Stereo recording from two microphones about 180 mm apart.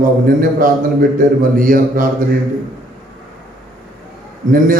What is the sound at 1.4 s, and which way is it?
Speech, 50° right (ahead or behind).